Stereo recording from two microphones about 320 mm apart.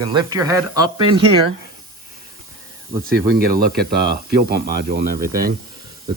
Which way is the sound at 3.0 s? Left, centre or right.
Right.